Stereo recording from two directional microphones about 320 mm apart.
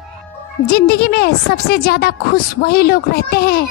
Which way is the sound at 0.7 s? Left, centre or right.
Left.